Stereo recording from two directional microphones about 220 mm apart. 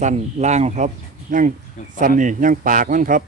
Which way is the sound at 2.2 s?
35° right (ahead or behind).